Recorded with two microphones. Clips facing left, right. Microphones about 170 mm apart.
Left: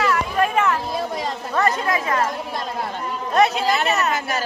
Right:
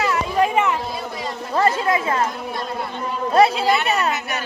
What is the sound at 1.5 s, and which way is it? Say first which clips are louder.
Speech: right 2 dB; 25° right (ahead or behind).